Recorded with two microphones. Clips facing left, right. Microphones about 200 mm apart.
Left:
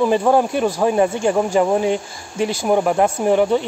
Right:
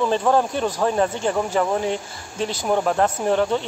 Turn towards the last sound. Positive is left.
turn(degrees=15)  # may be behind; listen again after turning